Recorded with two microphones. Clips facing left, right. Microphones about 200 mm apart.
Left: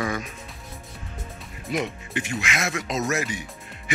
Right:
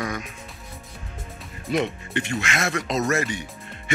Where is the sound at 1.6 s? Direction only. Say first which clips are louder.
Right 3 dB; centre (ahead or behind).